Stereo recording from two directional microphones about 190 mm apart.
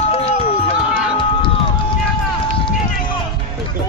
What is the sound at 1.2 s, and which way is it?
Run, 25° left (ahead or behind).